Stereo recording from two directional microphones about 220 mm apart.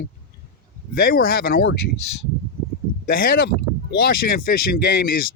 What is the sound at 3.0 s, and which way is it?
Speech, 40° left (ahead or behind).